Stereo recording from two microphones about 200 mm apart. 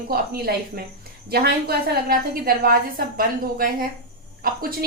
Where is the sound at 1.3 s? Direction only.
50° right (ahead or behind).